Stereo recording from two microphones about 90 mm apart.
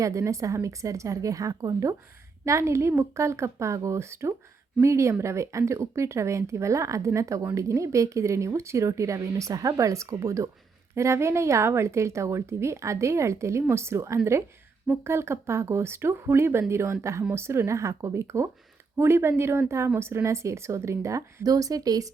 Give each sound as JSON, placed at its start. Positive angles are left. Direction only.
{"t": 0.0, "sound": "speech", "side_deg": -35}